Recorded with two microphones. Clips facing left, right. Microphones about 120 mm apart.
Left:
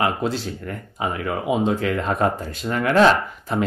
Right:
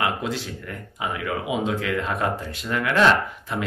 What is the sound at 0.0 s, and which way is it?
Speech, 35° left (ahead or behind).